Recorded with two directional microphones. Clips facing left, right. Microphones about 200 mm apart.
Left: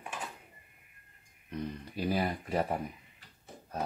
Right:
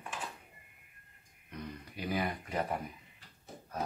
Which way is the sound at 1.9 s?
30° left (ahead or behind).